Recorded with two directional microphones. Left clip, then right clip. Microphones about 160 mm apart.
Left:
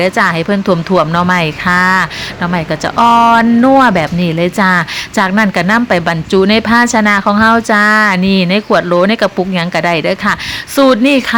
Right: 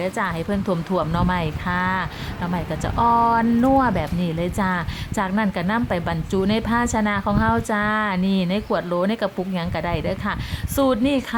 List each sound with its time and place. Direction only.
0.0 s speech: 25° left (ahead or behind)